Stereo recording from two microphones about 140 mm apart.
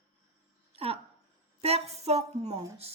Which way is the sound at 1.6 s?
45° right (ahead or behind).